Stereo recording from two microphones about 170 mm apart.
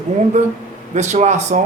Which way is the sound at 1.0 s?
45° right (ahead or behind).